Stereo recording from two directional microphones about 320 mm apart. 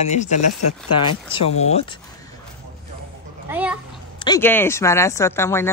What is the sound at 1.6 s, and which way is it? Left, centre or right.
Speech, centre.